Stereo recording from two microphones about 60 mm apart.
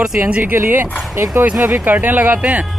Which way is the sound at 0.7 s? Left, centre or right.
Right.